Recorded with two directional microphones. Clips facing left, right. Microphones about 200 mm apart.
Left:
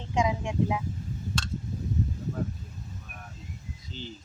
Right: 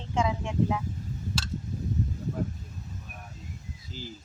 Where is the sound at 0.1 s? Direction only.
15° left (ahead or behind).